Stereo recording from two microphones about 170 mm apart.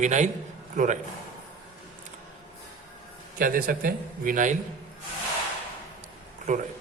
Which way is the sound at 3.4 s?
55° right (ahead or behind).